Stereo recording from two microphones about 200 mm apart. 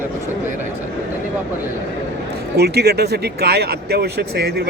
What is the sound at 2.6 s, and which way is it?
Speech, 55° right (ahead or behind).